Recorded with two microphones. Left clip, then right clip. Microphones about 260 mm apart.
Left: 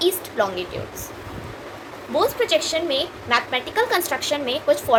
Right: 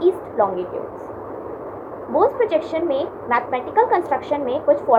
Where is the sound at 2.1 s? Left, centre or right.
Left.